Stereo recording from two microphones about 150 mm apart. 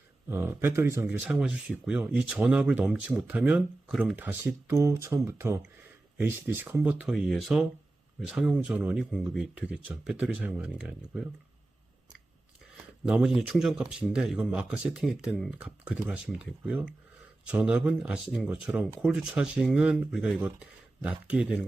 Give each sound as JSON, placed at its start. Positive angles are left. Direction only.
{"t": 0.3, "sound": "speech", "side_deg": -15}
{"t": 13.1, "sound": "speech", "side_deg": -5}